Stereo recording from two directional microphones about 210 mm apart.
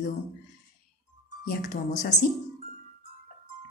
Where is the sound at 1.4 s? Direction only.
55° left (ahead or behind).